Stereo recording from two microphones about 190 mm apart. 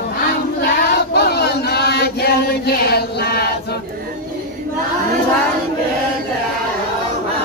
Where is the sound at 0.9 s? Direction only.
60° left (ahead or behind).